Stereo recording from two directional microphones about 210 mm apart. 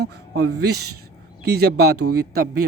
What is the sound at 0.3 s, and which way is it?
A man's voice, 50° right (ahead or behind).